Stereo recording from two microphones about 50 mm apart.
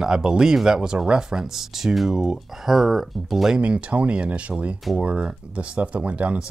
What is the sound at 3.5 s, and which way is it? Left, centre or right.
Speech, right.